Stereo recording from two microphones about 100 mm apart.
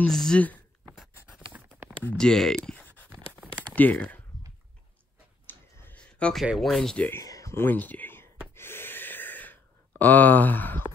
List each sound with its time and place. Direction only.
0.0 s speech: 5° left (ahead or behind)
1.2 s patter: 15° right (ahead or behind)
2.1 s speech: 5° left (ahead or behind)
3.1 s a sound: 20° right (ahead or behind)
3.5 s a sound: 15° left (ahead or behind)
5.5 s clicking: 20° left (ahead or behind)
6.4 s speech: centre (ahead or behind)
7.1 s speech: 30° left (ahead or behind)
8.5 s gasp: 25° left (ahead or behind)